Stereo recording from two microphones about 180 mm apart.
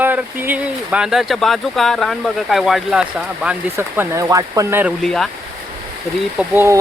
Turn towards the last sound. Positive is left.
turn(degrees=-10)  # may be behind; listen again after turning